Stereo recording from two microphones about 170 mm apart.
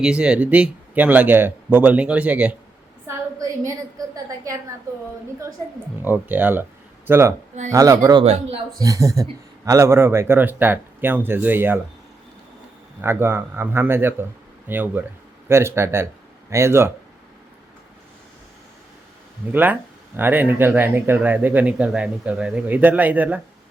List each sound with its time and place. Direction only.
0.0 s speech: 5° right (ahead or behind)
3.7 s a woman's voice: 20° right (ahead or behind)
6.0 s a woman's voice: 10° right (ahead or behind)
8.2 s a man's voice: 35° right (ahead or behind)
8.8 s a woman's voice: 20° right (ahead or behind)
13.0 s speech: 15° right (ahead or behind)
19.5 s speech: 10° right (ahead or behind)